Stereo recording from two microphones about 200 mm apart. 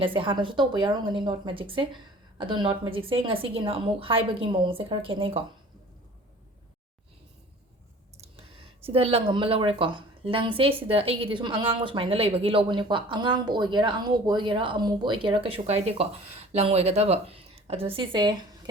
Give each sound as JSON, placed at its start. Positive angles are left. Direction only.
{"t": 0.0, "sound": "speech", "side_deg": -25}
{"t": 8.8, "sound": "a woman's voice", "side_deg": -30}